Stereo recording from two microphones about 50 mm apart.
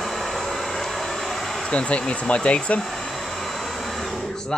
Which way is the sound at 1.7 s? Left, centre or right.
Left.